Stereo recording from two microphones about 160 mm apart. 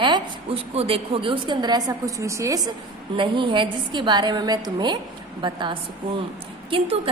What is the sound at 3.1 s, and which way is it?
A woman's voice, 30° right (ahead or behind).